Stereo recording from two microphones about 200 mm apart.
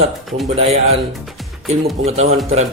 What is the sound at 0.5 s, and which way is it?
Speech, 30° right (ahead or behind).